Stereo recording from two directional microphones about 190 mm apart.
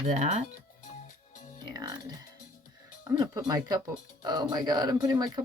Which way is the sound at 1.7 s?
20° right (ahead or behind).